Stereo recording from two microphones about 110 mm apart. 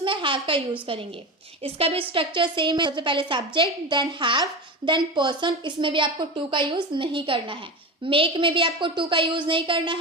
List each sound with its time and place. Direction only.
0.0 s a sound: 50° right (ahead or behind)
0.9 s a woman's voice: 50° right (ahead or behind)
1.6 s a woman's voice: 60° right (ahead or behind)